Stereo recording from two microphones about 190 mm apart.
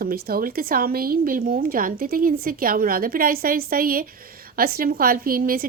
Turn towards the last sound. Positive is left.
turn(degrees=-50)  # may be behind; listen again after turning